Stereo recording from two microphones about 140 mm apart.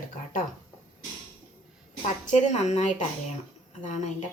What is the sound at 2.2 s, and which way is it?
Speech, 60° left (ahead or behind).